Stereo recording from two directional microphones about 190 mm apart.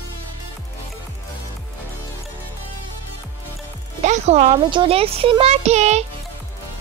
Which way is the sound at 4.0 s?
35° right (ahead or behind).